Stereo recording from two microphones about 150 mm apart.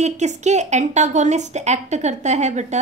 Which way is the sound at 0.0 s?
50° right (ahead or behind).